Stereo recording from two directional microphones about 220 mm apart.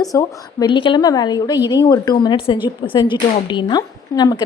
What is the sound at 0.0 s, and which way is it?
Speech, 15° left (ahead or behind).